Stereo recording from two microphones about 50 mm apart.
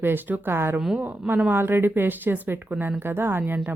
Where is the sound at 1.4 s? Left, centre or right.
Right.